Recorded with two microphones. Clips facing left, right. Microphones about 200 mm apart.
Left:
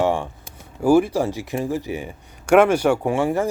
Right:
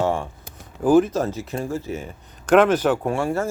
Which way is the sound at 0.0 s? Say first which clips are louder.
Left 2 dB; 15° left (ahead or behind).